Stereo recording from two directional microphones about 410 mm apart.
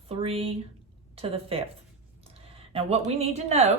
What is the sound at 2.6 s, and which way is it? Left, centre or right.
Speech, centre.